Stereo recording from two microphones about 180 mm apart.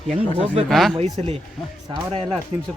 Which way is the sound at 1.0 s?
35° right (ahead or behind).